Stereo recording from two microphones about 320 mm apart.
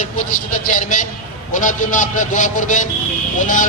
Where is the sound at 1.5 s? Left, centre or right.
Left.